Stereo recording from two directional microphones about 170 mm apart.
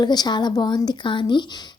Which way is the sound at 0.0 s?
25° left (ahead or behind).